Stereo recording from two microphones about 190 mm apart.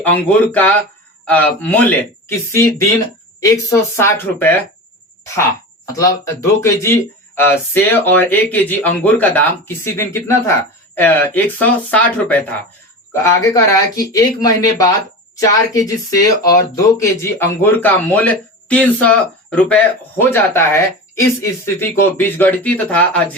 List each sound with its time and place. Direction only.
0.0 s speech: 10° left (ahead or behind)